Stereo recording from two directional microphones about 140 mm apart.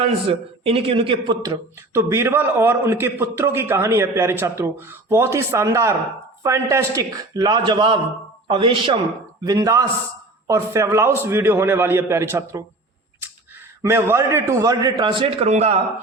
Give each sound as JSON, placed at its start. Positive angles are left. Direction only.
{"t": 0.0, "sound": "a man's voice", "side_deg": -45}
{"t": 1.4, "sound": "a man's voice", "side_deg": -20}
{"t": 9.4, "sound": "a man's voice", "side_deg": -25}
{"t": 13.8, "sound": "a man's voice", "side_deg": -20}
{"t": 15.4, "sound": "a man's voice", "side_deg": -55}